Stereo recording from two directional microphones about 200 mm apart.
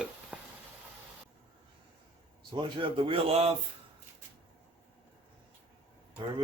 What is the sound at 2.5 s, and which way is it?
Speech, 25° right (ahead or behind).